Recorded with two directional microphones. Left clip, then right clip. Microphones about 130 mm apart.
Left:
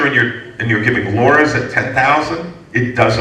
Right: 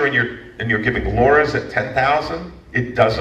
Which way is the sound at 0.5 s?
40° left (ahead or behind).